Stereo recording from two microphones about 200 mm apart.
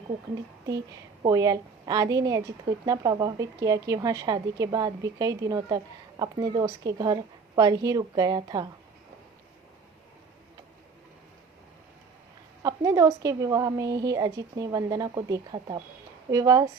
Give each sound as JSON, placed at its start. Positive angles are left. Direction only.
{"t": 1.2, "sound": "a woman's voice", "side_deg": -20}
{"t": 12.6, "sound": "a woman's voice", "side_deg": -15}